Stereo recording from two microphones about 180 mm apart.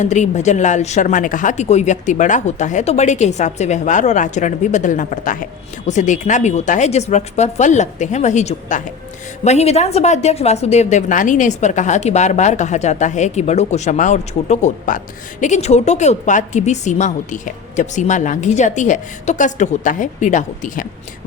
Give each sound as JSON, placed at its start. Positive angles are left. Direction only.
{"t": 0.0, "sound": "a woman's voice", "side_deg": 40}